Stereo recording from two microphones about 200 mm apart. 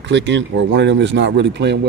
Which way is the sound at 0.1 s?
60° right (ahead or behind).